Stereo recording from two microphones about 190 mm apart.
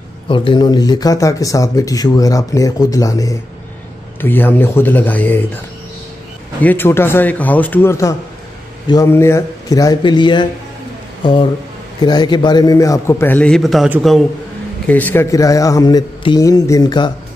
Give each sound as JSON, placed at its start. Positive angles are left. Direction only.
{"t": 0.3, "sound": "speech", "side_deg": 25}
{"t": 6.6, "sound": "speech", "side_deg": 10}
{"t": 12.0, "sound": "speech", "side_deg": 20}
{"t": 14.9, "sound": "speech", "side_deg": 10}